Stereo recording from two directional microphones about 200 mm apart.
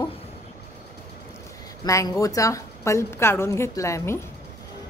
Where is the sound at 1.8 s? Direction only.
15° left (ahead or behind).